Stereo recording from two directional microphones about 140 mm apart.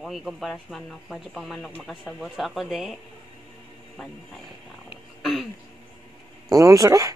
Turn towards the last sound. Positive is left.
turn(degrees=-25)  # may be behind; listen again after turning